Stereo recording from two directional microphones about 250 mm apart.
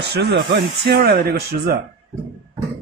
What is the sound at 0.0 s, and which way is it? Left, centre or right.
Speech, right.